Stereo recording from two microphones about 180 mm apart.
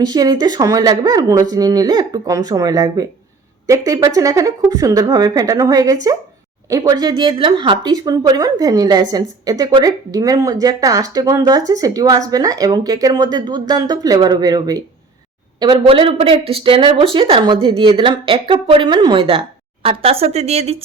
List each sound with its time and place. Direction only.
0.0 s speech: 20° right (ahead or behind)
15.6 s speech: 30° right (ahead or behind)